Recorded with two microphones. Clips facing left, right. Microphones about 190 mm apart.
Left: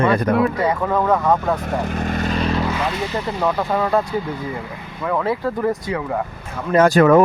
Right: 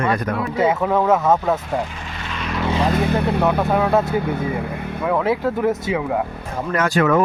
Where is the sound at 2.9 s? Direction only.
55° right (ahead or behind).